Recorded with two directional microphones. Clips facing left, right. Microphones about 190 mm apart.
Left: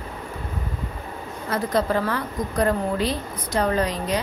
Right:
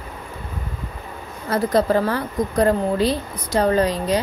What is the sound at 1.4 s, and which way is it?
A woman's voice, 35° right (ahead or behind).